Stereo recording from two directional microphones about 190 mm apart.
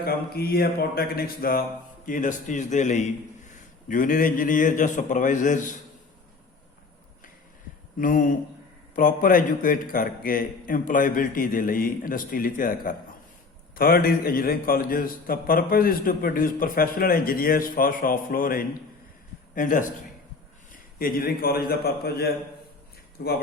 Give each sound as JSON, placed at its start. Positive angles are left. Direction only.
{"t": 0.0, "sound": "a man's voice", "side_deg": 55}
{"t": 7.9, "sound": "a man's voice", "side_deg": 45}
{"t": 21.0, "sound": "a man's voice", "side_deg": 50}